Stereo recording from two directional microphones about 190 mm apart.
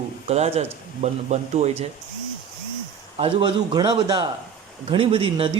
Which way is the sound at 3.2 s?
30° right (ahead or behind).